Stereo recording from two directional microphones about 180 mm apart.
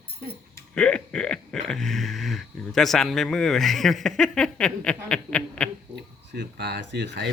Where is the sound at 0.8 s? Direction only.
5° left (ahead or behind).